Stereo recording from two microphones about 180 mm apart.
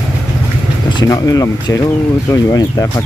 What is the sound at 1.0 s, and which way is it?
Speech, 20° left (ahead or behind).